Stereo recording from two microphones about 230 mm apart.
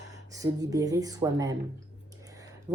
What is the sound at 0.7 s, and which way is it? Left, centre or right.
Speech, centre.